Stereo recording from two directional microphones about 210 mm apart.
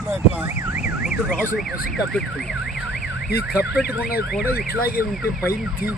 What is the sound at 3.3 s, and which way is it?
Speech, 50° left (ahead or behind).